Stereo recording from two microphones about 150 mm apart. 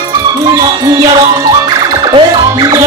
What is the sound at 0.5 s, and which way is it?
Speech, 25° right (ahead or behind).